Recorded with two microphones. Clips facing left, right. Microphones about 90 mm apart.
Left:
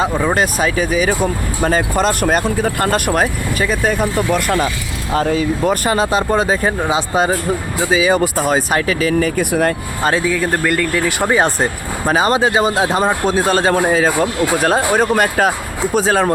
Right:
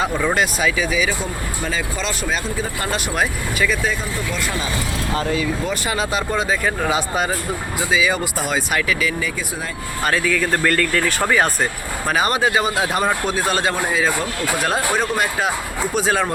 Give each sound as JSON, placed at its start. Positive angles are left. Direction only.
{"t": 0.0, "sound": "speech", "side_deg": 30}
{"t": 4.0, "sound": "speech", "side_deg": 55}
{"t": 5.1, "sound": "speech", "side_deg": 40}
{"t": 6.8, "sound": "speech", "side_deg": 25}
{"t": 9.4, "sound": "speech", "side_deg": 60}
{"t": 10.0, "sound": "speech", "side_deg": 25}
{"t": 11.3, "sound": "speech", "side_deg": 25}
{"t": 16.0, "sound": "speech", "side_deg": 35}